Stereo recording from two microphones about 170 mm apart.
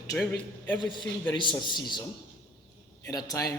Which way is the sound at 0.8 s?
25° left (ahead or behind).